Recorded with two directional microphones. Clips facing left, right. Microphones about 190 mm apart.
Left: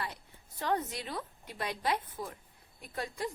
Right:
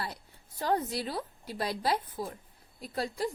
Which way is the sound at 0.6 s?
35° right (ahead or behind).